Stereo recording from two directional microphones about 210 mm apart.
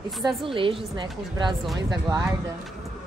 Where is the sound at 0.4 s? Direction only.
25° right (ahead or behind).